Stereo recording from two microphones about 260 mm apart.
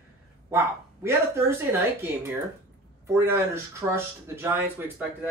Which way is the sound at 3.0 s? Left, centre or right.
Centre.